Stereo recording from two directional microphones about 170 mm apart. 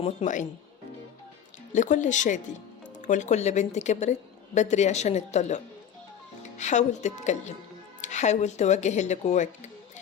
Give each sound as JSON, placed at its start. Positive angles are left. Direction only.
{"t": 0.0, "sound": "speech", "side_deg": 40}
{"t": 1.7, "sound": "speech", "side_deg": 45}